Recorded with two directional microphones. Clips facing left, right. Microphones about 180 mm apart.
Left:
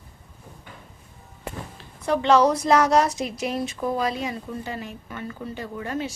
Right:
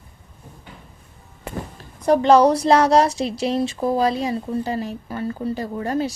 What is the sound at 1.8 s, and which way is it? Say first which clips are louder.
A woman's voice: right 6 dB; 40° right (ahead or behind).